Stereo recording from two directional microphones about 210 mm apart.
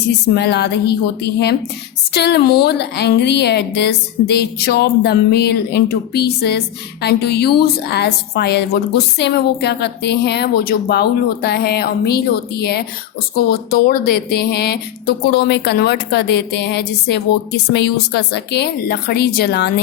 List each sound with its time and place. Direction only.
0.3 s a woman's voice: 50° left (ahead or behind)